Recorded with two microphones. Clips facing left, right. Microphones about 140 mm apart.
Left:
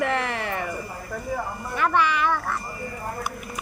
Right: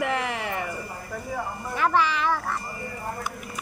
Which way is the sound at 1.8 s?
30° right (ahead or behind).